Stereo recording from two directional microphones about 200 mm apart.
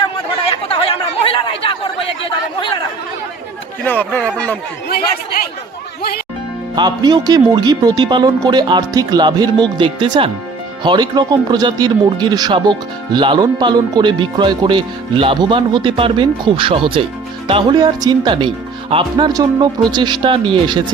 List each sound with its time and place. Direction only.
0.4 s chatter: 25° left (ahead or behind)
3.8 s speech: 10° left (ahead or behind)
6.7 s speech: 20° right (ahead or behind)